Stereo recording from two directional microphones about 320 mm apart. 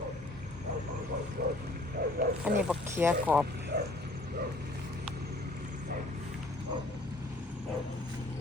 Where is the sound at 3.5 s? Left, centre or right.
Right.